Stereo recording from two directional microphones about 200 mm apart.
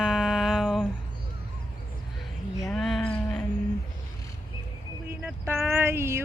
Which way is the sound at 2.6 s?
Centre (ahead or behind).